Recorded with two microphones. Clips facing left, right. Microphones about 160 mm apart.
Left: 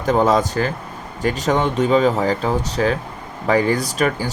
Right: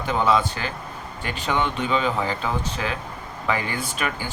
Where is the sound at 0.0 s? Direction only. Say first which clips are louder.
Left 5 dB; 45° left (ahead or behind).